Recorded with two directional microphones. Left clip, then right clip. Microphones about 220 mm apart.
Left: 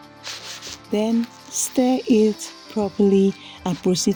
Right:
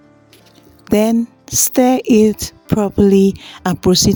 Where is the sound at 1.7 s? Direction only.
45° right (ahead or behind).